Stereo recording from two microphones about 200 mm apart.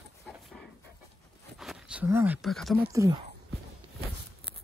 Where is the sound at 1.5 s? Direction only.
5° right (ahead or behind).